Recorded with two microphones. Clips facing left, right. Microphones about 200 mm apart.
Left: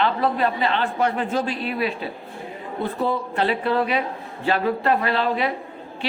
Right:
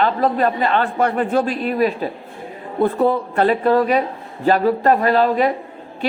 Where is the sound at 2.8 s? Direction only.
55° right (ahead or behind).